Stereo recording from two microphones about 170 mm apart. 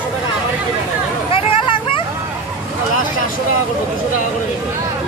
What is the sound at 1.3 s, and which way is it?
Hubbub, 30° left (ahead or behind).